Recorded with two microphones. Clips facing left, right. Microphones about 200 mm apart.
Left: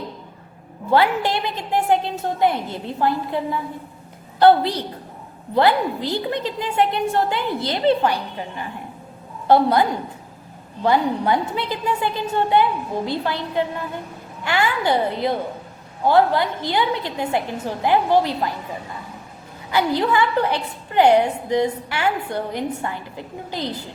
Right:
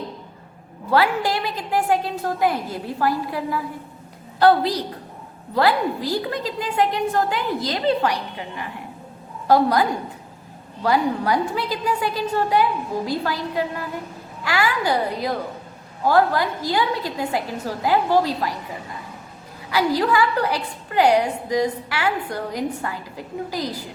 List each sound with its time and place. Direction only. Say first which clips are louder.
0.9 s a woman's voice: left 1 dB; 25° left (ahead or behind)
10.8 s a woman's voice: left 1 dB; 25° left (ahead or behind)
19.7 s a woman's voice: even; 25° left (ahead or behind)